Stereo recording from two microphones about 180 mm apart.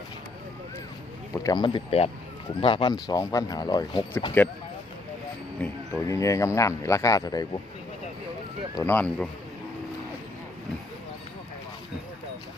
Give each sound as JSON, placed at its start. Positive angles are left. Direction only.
{"t": 1.3, "sound": "speech", "side_deg": 20}
{"t": 5.5, "sound": "speech", "side_deg": 10}
{"t": 8.7, "sound": "speech", "side_deg": 10}